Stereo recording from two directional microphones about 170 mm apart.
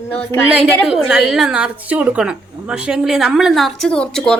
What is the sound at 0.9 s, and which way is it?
A woman's voice, 5° right (ahead or behind).